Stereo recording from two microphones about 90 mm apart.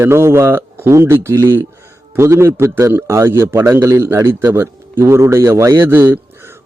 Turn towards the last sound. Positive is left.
turn(degrees=-25)  # may be behind; listen again after turning